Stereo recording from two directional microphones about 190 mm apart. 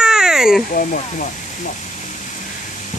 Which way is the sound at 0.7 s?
45° left (ahead or behind).